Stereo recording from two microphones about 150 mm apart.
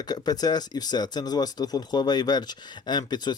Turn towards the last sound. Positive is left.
turn(degrees=30)  # may be behind; listen again after turning